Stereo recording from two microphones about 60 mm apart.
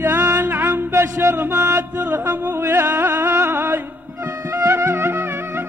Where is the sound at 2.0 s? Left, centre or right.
Right.